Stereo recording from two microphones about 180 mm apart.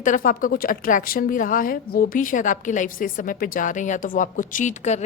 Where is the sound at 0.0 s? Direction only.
45° left (ahead or behind).